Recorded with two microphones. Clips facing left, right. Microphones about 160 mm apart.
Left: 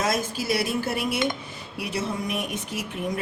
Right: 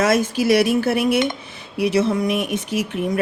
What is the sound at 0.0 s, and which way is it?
A woman's voice, 75° right (ahead or behind).